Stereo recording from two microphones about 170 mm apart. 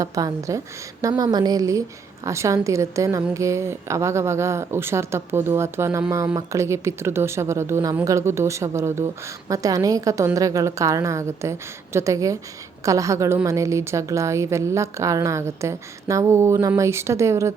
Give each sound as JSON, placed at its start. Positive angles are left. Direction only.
{"t": 0.0, "sound": "a woman's voice", "side_deg": -20}